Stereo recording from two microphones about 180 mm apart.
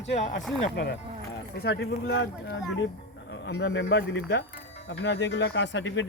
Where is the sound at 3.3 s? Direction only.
75° left (ahead or behind).